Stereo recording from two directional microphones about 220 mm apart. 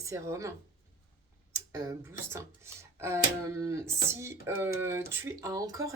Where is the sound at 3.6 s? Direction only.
15° right (ahead or behind).